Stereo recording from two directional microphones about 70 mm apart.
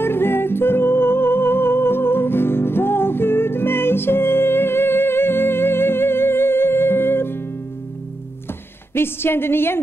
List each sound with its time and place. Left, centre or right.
0.0 s music: left
8.9 s a woman's voice: left